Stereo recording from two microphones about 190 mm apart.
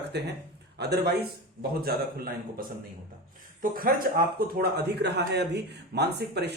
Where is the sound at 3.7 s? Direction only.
50° right (ahead or behind).